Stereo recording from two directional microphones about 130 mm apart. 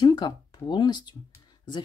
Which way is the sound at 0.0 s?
35° left (ahead or behind).